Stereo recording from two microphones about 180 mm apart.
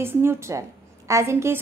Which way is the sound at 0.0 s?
15° right (ahead or behind).